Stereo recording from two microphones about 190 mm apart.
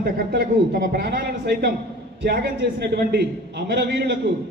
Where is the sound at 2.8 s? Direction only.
60° right (ahead or behind).